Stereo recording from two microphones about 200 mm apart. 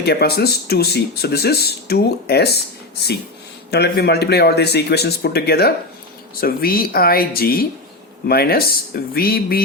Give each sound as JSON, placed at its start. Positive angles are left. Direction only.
{"t": 0.0, "sound": "speech", "side_deg": 55}